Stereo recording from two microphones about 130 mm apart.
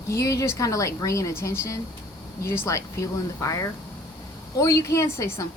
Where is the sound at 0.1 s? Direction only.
25° left (ahead or behind).